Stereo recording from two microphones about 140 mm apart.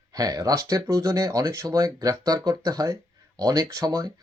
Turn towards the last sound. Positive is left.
turn(degrees=-25)  # may be behind; listen again after turning